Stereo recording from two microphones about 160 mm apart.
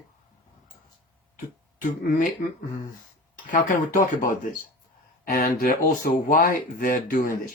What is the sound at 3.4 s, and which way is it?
Speech, 55° left (ahead or behind).